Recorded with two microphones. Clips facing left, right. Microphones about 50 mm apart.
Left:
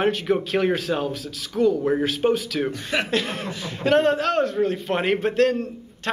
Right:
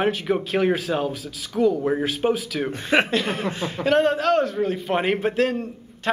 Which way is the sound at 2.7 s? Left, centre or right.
Right.